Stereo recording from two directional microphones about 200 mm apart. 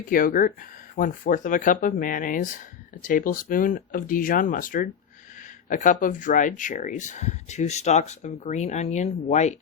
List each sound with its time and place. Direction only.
0.1 s speech: 45° left (ahead or behind)